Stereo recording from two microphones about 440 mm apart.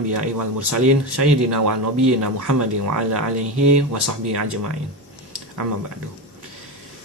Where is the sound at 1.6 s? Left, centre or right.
Right.